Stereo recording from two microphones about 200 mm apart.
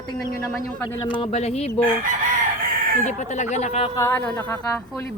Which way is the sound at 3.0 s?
35° left (ahead or behind).